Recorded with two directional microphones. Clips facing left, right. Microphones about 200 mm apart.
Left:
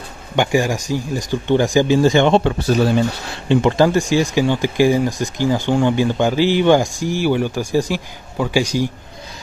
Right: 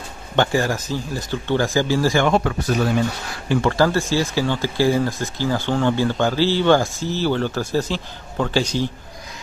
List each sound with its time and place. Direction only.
0.4 s speech: 15° left (ahead or behind); by 3.0 s 30° left (ahead or behind)
3.4 s speech: 20° left (ahead or behind)